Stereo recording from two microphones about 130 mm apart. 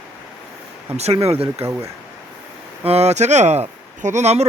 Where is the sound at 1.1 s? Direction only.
50° right (ahead or behind).